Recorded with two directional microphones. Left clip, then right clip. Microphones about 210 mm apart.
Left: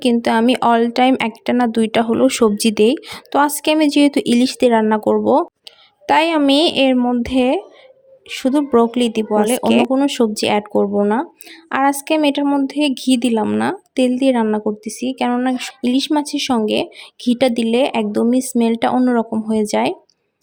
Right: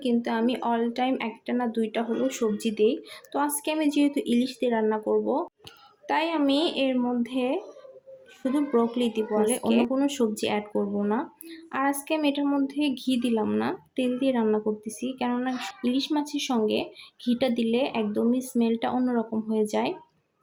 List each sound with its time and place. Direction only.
0.0 s speech: 50° left (ahead or behind)